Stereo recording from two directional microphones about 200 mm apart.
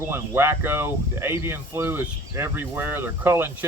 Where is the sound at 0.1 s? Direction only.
10° right (ahead or behind).